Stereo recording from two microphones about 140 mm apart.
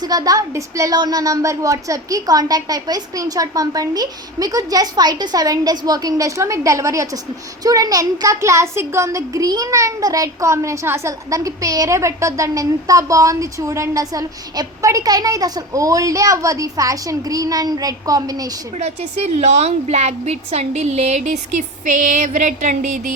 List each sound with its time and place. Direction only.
0.0 s speech: 25° right (ahead or behind)
18.8 s a woman's voice: 50° right (ahead or behind)
22.0 s a sound: 60° right (ahead or behind)